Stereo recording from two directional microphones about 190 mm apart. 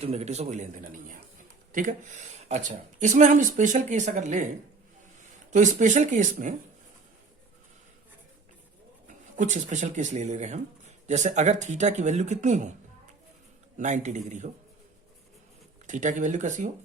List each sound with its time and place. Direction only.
0.0 s speech: 35° right (ahead or behind)
5.5 s speech: 40° right (ahead or behind)
9.0 s speech: 40° right (ahead or behind)
13.7 s speech: 40° right (ahead or behind)
15.9 s speech: 40° right (ahead or behind)